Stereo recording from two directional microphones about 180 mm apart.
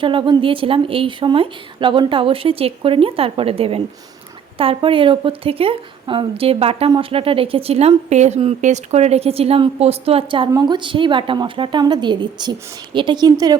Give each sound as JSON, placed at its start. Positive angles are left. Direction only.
{"t": 0.0, "sound": "a woman's voice", "side_deg": -25}